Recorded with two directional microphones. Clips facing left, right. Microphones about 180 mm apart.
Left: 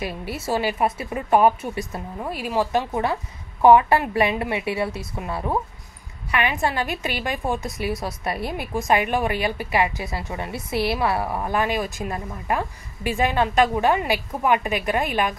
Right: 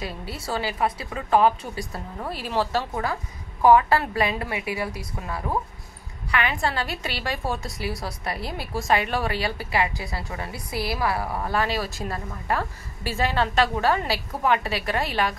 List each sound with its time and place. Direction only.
0.4 s a woman's voice: 20° left (ahead or behind)